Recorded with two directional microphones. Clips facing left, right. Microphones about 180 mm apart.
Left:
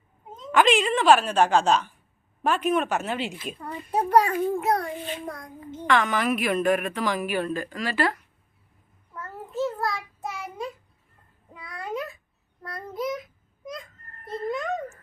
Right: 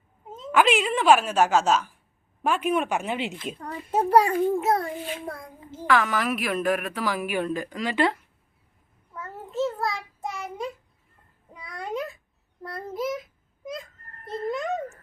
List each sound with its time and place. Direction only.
0.4 s a child's voice: 5° right (ahead or behind)
3.6 s a child's voice: centre (ahead or behind); by 8.2 s 20° right (ahead or behind)
9.1 s child singing: centre (ahead or behind)
11.5 s a sound: centre (ahead or behind)
12.6 s a child's voice: centre (ahead or behind)
14.3 s babbling: centre (ahead or behind)